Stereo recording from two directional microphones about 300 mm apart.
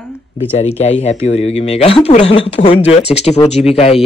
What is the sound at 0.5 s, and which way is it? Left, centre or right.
Speech, left.